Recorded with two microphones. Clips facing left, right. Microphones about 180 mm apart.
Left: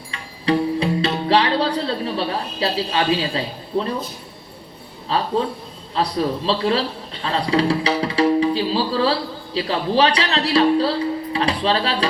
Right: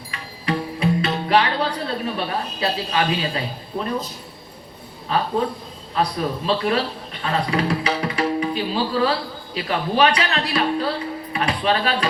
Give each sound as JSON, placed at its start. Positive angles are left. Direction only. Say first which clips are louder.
{"t": 0.1, "sound": "music", "louder": "left 5 dB", "side_deg": 30}
{"t": 5.9, "sound": "speech", "louder": "left 2 dB", "side_deg": 30}